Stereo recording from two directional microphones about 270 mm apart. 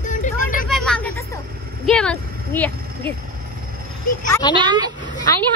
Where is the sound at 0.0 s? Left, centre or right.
Left.